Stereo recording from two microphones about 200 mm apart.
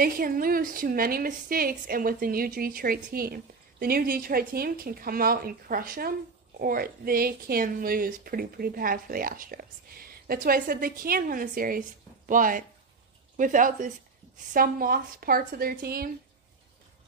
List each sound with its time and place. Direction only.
0.0 s speech: 45° right (ahead or behind)